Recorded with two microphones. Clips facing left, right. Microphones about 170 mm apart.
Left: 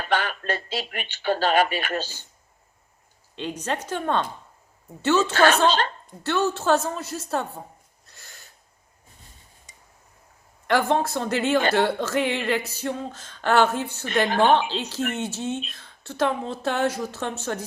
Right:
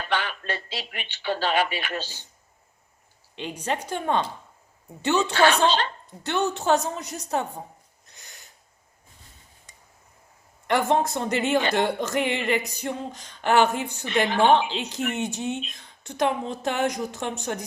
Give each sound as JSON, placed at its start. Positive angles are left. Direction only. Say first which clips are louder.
{"t": 0.0, "sound": "speech", "louder": "left 3 dB", "side_deg": 45}
{"t": 3.3, "sound": "speech", "louder": "left 1 dB", "side_deg": -10}
{"t": 5.3, "sound": "speech", "louder": "right 1 dB", "side_deg": 45}
{"t": 6.2, "sound": "speech", "louder": "left 1 dB", "side_deg": -15}
{"t": 8.0, "sound": "owl", "louder": "left 1 dB", "side_deg": -15}
{"t": 10.7, "sound": "speech", "louder": "even", "side_deg": -20}
{"t": 14.3, "sound": "speech", "louder": "even", "side_deg": 45}
{"t": 14.6, "sound": "speech", "louder": "left 1 dB", "side_deg": -15}